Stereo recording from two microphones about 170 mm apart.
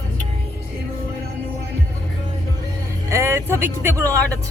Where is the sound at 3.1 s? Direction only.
15° right (ahead or behind).